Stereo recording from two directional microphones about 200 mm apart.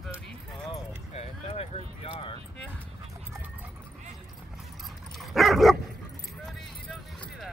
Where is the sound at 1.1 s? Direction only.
30° left (ahead or behind).